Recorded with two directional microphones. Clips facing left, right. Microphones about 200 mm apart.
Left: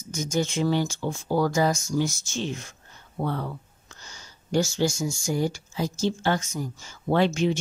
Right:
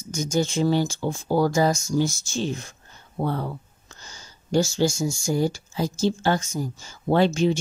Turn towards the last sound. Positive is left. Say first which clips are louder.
# right 3 dB
turn(degrees=-35)  # may be behind; listen again after turning